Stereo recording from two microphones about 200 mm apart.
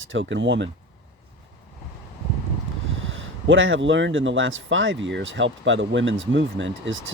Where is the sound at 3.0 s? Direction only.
70° right (ahead or behind).